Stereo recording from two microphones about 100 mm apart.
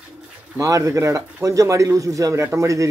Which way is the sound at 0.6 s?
35° right (ahead or behind).